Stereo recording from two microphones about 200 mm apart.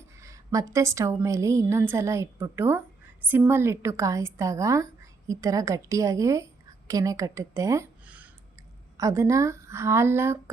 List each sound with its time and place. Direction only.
0.2 s a woman's voice: 15° right (ahead or behind)